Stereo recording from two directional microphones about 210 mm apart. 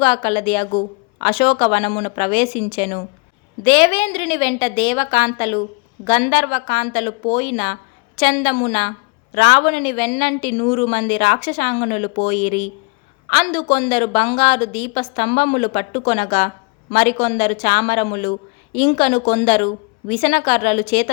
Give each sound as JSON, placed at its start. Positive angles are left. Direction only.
{"t": 0.0, "sound": "speech", "side_deg": 20}